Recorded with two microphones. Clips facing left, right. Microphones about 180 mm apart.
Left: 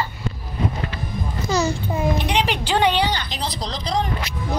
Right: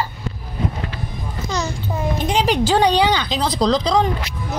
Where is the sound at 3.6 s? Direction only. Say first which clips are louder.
Right 13 dB; 90° right.